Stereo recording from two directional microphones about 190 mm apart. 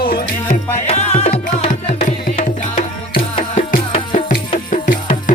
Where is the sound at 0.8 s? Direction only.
35° left (ahead or behind).